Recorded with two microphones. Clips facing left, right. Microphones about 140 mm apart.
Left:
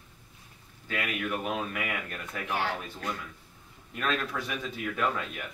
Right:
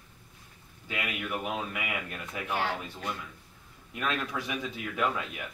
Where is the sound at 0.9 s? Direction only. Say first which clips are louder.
Left 2 dB; 15° right (ahead or behind).